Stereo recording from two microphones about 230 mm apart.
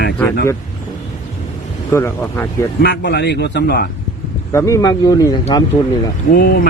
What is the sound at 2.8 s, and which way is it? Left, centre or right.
Speech, left.